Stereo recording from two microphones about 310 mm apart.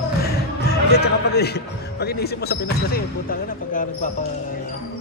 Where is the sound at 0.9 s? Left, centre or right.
Left.